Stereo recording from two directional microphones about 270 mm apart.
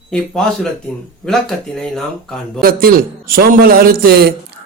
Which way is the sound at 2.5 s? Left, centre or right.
Right.